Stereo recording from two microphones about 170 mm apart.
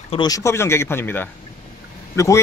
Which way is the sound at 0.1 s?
25° left (ahead or behind).